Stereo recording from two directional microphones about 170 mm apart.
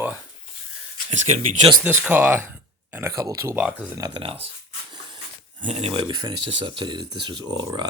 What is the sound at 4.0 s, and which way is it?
Speech, 30° right (ahead or behind).